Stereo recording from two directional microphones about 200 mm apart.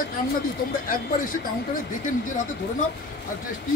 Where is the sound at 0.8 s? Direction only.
45° left (ahead or behind).